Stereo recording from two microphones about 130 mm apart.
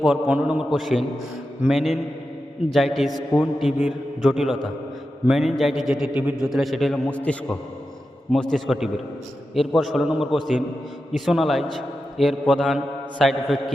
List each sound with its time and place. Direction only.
0.0 s a man's voice: 5° right (ahead or behind)